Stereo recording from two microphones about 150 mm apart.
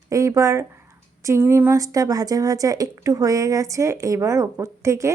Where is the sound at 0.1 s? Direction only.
20° right (ahead or behind).